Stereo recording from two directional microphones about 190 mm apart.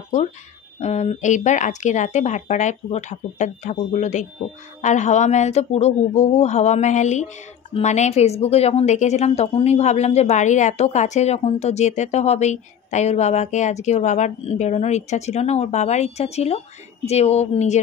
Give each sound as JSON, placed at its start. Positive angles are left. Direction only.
{"t": 0.7, "sound": "a woman's voice", "side_deg": 35}